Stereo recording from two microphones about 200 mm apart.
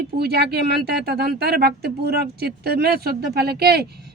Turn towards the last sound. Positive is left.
turn(degrees=-50)  # may be behind; listen again after turning